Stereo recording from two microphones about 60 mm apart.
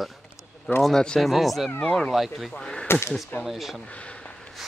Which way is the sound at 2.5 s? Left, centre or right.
Centre.